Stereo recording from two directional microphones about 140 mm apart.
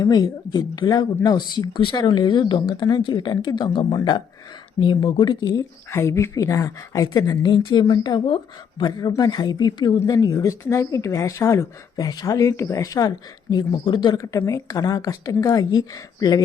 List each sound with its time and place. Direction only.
0.0 s speech: 30° left (ahead or behind)
5.9 s speech: 20° left (ahead or behind)